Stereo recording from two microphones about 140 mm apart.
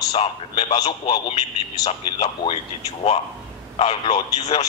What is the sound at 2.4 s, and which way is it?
Speech, 30° left (ahead or behind).